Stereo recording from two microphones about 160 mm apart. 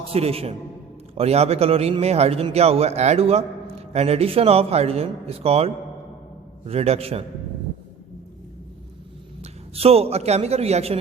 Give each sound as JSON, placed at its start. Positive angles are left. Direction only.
{"t": 0.1, "sound": "a man's voice", "side_deg": -40}
{"t": 9.4, "sound": "speech", "side_deg": -40}